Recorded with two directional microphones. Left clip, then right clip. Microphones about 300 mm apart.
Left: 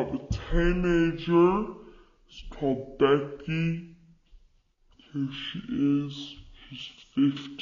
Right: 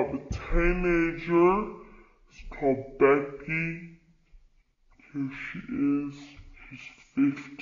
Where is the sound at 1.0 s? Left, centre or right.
Left.